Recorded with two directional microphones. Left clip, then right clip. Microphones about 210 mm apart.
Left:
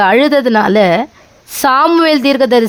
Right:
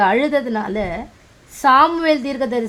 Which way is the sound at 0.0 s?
40° left (ahead or behind).